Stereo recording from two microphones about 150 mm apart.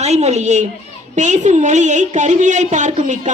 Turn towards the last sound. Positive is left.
turn(degrees=-55)  # may be behind; listen again after turning